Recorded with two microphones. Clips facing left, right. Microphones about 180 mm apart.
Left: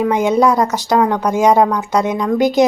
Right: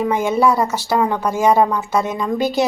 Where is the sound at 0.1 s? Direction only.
15° left (ahead or behind).